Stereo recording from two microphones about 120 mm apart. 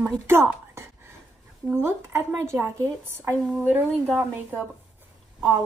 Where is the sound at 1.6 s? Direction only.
20° right (ahead or behind).